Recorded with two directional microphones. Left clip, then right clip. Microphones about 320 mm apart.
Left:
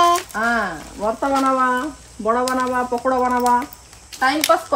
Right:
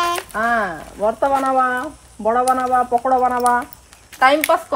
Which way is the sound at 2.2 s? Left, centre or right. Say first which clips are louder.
Right 3 dB; centre.